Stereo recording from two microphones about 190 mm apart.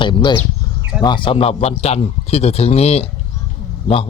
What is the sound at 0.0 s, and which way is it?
Speech, 25° left (ahead or behind).